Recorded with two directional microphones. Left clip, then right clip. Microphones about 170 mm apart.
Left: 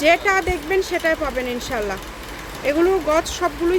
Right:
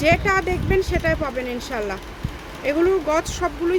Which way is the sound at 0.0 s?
Centre (ahead or behind).